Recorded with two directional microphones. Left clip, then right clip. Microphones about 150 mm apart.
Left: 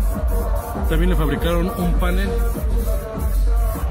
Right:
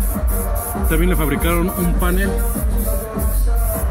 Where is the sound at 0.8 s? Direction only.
Centre (ahead or behind).